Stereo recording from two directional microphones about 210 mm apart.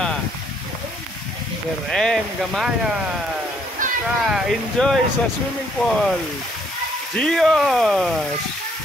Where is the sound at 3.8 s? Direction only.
40° right (ahead or behind).